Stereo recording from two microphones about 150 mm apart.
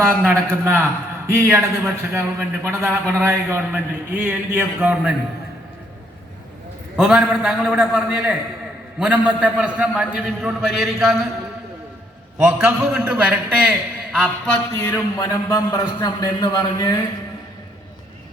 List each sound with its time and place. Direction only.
0.2 s a man's voice: 15° right (ahead or behind)
6.9 s a man's voice: 5° right (ahead or behind)
12.4 s a man's voice: 10° right (ahead or behind)
14.4 s music: 10° left (ahead or behind)
15.2 s a man's voice: 25° left (ahead or behind)